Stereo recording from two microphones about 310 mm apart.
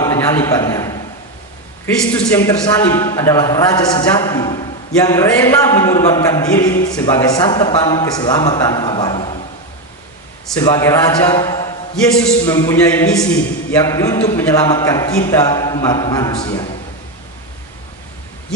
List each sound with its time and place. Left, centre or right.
0.0 s a man's voice: centre
2.1 s a man's voice: centre
10.6 s a man's voice: centre